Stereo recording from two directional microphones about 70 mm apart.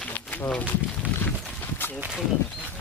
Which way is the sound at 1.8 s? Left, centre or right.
Left.